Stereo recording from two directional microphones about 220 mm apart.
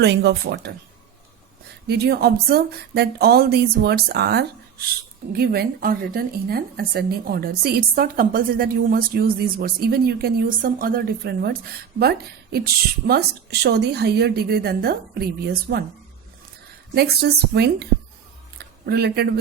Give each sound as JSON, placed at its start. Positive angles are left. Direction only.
{"t": 0.0, "sound": "a woman's voice", "side_deg": -50}
{"t": 1.9, "sound": "a woman's voice", "side_deg": -45}
{"t": 16.9, "sound": "a woman's voice", "side_deg": -45}
{"t": 18.5, "sound": "a sound", "side_deg": -45}